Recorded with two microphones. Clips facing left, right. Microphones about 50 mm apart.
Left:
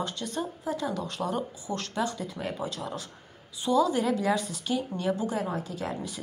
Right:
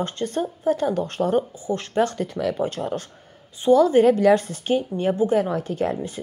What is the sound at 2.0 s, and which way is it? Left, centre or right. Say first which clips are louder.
Speech: right 10 dB; right.